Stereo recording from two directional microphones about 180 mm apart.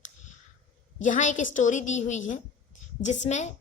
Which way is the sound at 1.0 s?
45° left (ahead or behind).